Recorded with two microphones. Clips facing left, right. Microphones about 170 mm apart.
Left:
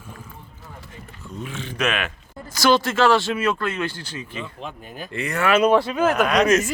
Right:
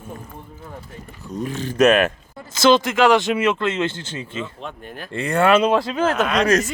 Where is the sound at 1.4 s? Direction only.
40° right (ahead or behind).